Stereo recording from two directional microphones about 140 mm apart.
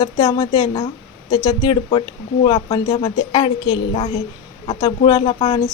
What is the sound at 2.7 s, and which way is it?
Speech, 30° left (ahead or behind).